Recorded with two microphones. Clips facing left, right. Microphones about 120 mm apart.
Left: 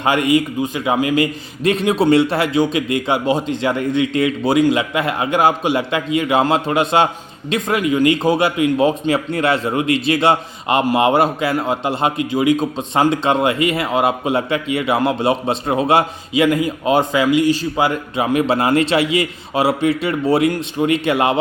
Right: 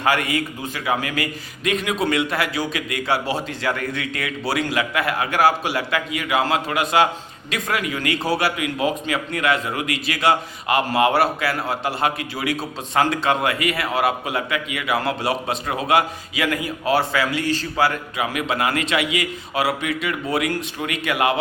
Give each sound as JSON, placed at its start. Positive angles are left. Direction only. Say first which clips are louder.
{"t": 0.0, "sound": "a man's voice", "louder": "left 6 dB", "side_deg": 20}